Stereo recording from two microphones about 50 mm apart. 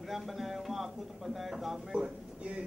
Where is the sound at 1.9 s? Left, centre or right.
Right.